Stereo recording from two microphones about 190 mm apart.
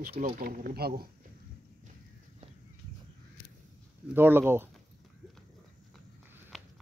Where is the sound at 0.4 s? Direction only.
50° right (ahead or behind).